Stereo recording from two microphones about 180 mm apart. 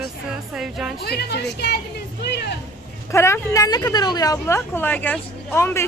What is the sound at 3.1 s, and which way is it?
A woman's voice, 15° left (ahead or behind).